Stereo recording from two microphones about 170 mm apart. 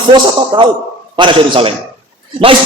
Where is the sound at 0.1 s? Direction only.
25° right (ahead or behind).